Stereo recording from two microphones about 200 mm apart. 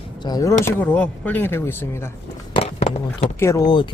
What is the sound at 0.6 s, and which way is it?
Speech, 10° left (ahead or behind).